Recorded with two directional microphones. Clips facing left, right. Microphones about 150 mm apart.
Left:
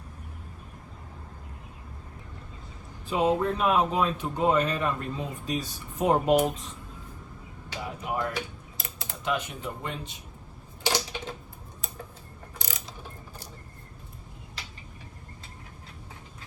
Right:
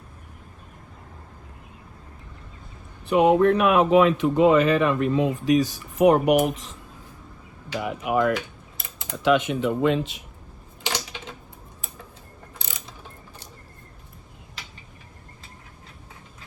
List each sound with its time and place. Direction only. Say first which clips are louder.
3.1 s speech: right 8 dB; 70° right (ahead or behind); by 8.4 s 90° right
8.8 s typing: even; 20° right (ahead or behind)
9.2 s speech: right 11 dB; 90° right
10.8 s a sound: left 2 dB; 10° left (ahead or behind)